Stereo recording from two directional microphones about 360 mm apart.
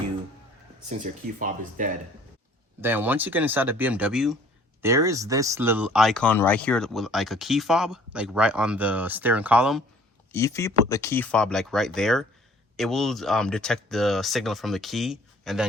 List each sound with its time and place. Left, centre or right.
0.9 s speech: right
2.8 s speech: centre